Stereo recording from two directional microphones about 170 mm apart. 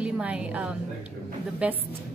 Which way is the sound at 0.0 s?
5° right (ahead or behind).